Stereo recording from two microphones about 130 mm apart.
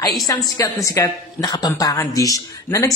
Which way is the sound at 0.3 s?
20° left (ahead or behind).